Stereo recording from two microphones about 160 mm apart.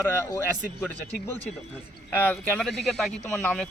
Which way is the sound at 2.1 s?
10° left (ahead or behind).